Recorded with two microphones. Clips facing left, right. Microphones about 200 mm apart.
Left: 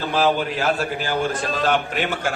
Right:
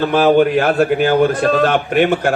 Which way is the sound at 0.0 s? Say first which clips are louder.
Right 9 dB; 55° right (ahead or behind).